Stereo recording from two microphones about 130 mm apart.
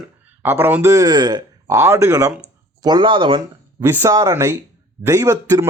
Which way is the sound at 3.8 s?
20° right (ahead or behind).